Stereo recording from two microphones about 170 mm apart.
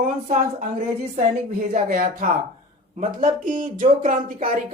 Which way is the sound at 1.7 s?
55° right (ahead or behind).